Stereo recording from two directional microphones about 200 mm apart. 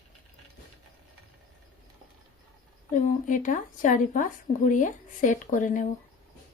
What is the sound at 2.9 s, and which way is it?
A woman's voice, 40° left (ahead or behind).